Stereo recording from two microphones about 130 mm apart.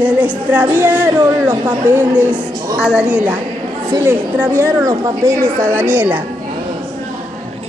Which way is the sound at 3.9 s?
20° right (ahead or behind).